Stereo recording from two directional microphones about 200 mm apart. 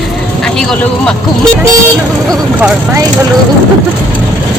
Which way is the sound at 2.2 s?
Centre (ahead or behind).